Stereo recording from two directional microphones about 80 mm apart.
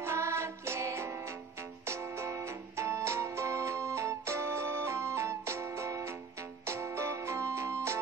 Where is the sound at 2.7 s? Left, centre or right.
Right.